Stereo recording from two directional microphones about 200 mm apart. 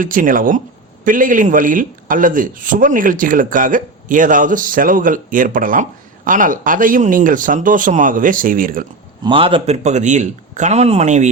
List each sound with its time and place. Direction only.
0.0 s a man's voice: 45° right (ahead or behind)
9.2 s a man's voice: 25° right (ahead or behind)